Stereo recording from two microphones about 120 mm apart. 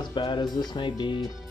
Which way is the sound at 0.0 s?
40° left (ahead or behind).